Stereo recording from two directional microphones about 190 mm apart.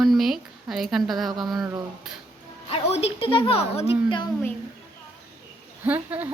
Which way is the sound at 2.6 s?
30° left (ahead or behind).